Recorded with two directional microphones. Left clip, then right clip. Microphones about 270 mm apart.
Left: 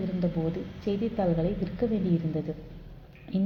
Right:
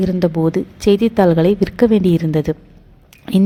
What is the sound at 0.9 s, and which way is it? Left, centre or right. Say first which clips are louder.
A woman's voice: right 16 dB; right.